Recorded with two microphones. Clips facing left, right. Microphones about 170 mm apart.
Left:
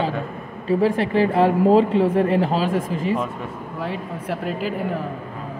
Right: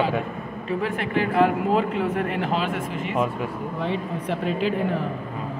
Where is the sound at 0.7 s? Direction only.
35° left (ahead or behind).